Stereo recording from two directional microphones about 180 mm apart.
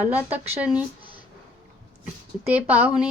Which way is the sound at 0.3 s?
5° right (ahead or behind).